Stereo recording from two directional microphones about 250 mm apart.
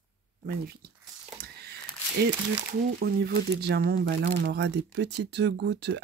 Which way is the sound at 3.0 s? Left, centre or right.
Right.